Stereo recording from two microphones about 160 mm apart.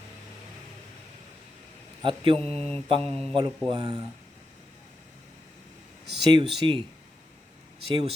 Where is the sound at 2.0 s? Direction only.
30° right (ahead or behind).